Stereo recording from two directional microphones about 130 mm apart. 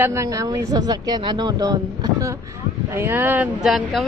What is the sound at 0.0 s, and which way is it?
Speech, 20° right (ahead or behind).